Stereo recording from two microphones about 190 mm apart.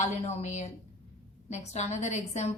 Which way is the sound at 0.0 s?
35° left (ahead or behind).